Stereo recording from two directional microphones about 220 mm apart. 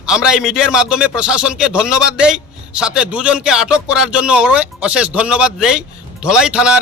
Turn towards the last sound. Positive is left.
turn(degrees=-5)  # may be behind; listen again after turning